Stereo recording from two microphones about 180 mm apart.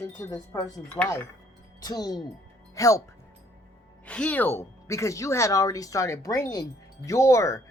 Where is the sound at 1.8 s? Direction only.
20° left (ahead or behind).